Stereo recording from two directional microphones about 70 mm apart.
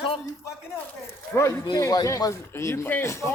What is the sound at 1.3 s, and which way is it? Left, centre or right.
Speech, left.